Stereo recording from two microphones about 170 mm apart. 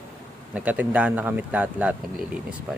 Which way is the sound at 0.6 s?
10° right (ahead or behind).